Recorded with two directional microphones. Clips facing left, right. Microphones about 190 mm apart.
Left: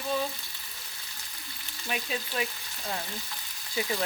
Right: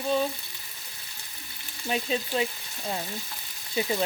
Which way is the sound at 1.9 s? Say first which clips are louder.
Right 6 dB; 25° right (ahead or behind).